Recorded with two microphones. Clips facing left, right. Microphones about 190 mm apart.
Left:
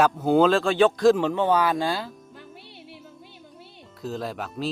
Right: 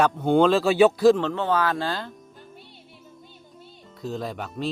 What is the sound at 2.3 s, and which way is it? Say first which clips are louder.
Music: left 2 dB; 70° left (ahead or behind).